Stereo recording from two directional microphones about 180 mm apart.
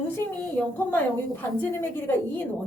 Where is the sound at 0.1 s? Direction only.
10° left (ahead or behind).